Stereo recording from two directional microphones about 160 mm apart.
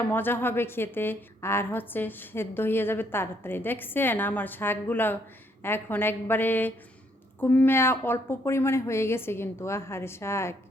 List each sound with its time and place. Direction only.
0.1 s a woman's voice: 10° left (ahead or behind)